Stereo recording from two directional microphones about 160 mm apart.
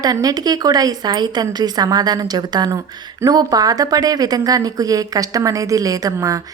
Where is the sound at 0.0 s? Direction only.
25° right (ahead or behind).